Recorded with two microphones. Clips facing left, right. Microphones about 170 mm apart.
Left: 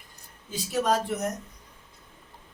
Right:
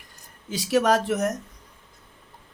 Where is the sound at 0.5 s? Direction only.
80° right.